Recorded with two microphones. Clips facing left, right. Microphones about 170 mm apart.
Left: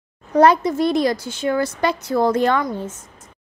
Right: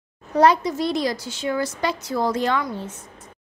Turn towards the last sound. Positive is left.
turn(degrees=45)  # may be behind; listen again after turning